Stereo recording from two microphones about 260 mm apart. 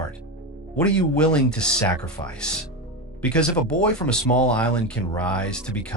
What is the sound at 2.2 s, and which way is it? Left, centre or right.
Speech, left.